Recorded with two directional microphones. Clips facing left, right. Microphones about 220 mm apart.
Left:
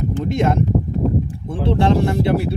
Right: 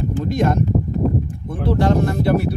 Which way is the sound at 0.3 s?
25° left (ahead or behind).